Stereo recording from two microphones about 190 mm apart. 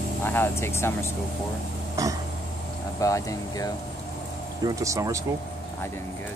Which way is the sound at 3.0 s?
15° left (ahead or behind).